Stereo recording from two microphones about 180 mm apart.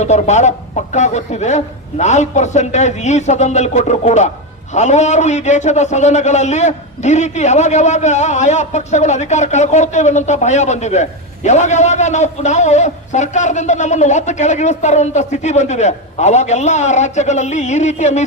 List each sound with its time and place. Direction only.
0.0 s a man's voice: 40° left (ahead or behind)